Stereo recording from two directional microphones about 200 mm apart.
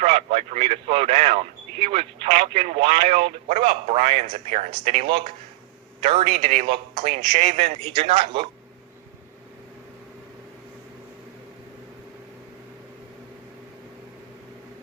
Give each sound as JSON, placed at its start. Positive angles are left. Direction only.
{"t": 0.0, "sound": "speech", "side_deg": -30}